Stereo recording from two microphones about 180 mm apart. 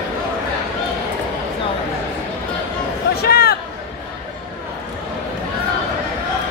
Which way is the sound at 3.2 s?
60° left (ahead or behind).